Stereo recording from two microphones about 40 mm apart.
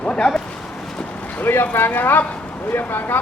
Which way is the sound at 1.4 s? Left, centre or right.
Left.